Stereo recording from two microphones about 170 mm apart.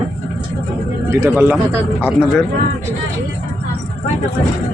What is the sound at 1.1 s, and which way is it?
Speech, 15° right (ahead or behind).